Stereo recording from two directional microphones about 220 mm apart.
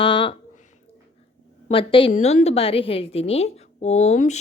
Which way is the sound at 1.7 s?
25° left (ahead or behind).